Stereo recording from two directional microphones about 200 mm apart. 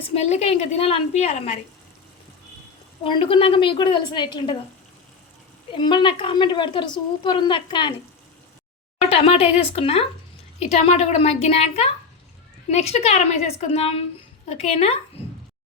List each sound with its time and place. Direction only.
0.1 s a woman's voice: 30° left (ahead or behind)
3.0 s a woman's voice: 25° left (ahead or behind)
5.7 s a woman's voice: 25° left (ahead or behind)
9.0 s a woman's voice: 30° left (ahead or behind)